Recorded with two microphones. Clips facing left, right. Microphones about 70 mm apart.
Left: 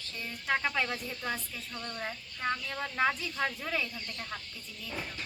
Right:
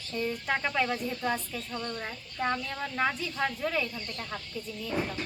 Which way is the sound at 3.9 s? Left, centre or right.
Centre.